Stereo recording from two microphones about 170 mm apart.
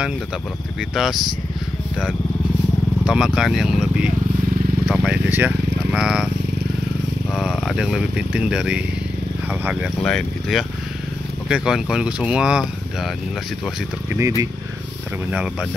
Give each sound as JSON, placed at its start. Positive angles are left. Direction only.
{"t": 0.7, "sound": "speech", "side_deg": 0}
{"t": 3.1, "sound": "speech", "side_deg": -5}
{"t": 7.3, "sound": "speech", "side_deg": 0}
{"t": 10.0, "sound": "speech", "side_deg": 0}
{"t": 14.1, "sound": "speech", "side_deg": -20}